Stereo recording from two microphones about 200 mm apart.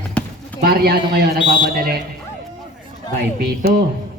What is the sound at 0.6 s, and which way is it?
Speech, 50° right (ahead or behind).